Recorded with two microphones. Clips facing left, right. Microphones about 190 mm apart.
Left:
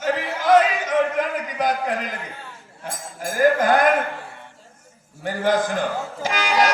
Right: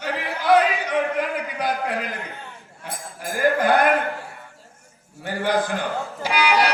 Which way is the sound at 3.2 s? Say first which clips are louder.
Left 2 dB; 45° left (ahead or behind).